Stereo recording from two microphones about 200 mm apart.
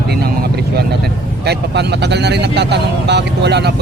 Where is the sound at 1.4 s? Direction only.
55° right (ahead or behind).